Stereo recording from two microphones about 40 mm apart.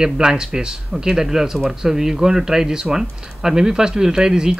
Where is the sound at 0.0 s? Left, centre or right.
Centre.